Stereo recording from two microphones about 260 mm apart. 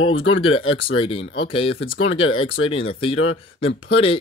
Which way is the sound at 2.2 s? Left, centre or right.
Left.